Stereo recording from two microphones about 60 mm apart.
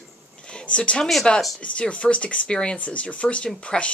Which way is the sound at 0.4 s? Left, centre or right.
Centre.